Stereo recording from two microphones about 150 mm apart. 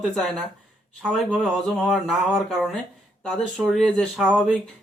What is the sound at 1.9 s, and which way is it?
Speech, centre (ahead or behind).